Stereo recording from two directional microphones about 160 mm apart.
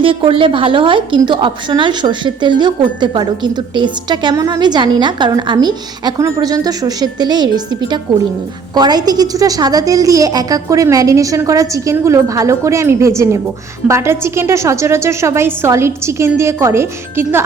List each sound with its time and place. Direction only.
0.0 s a woman's voice: 35° right (ahead or behind); by 17.4 s 15° right (ahead or behind)